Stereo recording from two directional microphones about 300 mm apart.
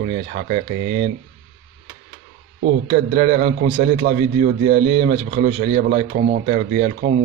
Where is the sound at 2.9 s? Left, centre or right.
Right.